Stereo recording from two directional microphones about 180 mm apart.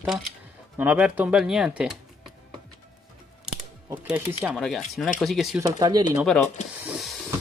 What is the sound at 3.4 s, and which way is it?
Speech, 5° right (ahead or behind).